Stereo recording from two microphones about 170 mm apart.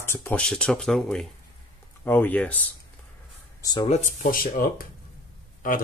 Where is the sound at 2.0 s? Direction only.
10° left (ahead or behind).